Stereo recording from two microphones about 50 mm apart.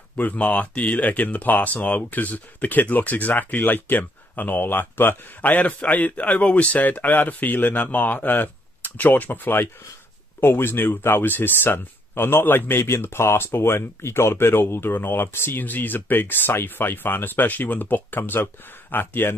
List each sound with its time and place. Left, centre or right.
0.1 s speech: left
5.6 s speech: left
15.6 s speech: left